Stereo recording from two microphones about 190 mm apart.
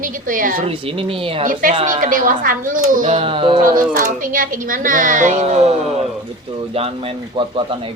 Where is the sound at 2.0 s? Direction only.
45° right (ahead or behind).